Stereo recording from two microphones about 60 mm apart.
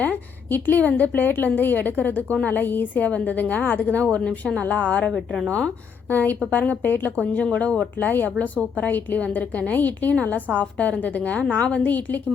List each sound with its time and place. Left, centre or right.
0.0 s a woman's voice: left
5.0 s a woman's voice: centre
5.5 s a woman's voice: left
7.9 s a woman's voice: left